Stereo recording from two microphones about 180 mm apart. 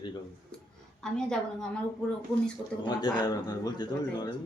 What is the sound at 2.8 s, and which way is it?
A man's voice, 25° left (ahead or behind).